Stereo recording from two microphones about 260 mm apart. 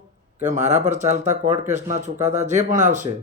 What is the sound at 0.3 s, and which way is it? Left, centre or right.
Speech, right.